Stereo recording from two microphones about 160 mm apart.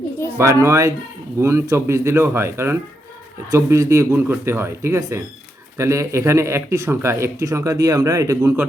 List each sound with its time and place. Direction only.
0.3 s speech: 15° right (ahead or behind)